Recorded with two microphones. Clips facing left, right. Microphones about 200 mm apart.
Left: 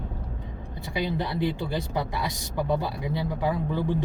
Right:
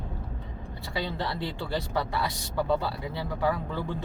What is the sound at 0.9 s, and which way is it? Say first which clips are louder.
Speech: left 4 dB; 15° left (ahead or behind).